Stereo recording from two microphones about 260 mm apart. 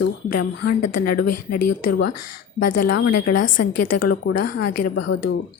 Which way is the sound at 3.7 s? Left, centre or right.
Left.